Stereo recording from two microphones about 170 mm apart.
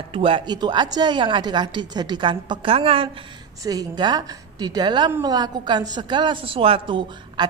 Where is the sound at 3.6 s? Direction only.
20° right (ahead or behind).